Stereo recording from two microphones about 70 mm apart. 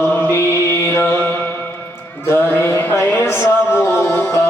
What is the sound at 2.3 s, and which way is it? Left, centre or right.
Music, left.